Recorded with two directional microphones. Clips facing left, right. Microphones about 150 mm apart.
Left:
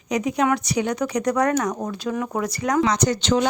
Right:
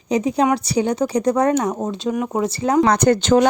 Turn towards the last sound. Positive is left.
turn(degrees=-50)  # may be behind; listen again after turning